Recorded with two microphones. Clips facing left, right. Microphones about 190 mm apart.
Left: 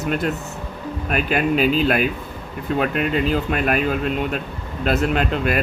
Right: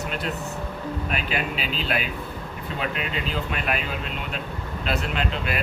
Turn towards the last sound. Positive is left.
turn(degrees=50)  # may be behind; listen again after turning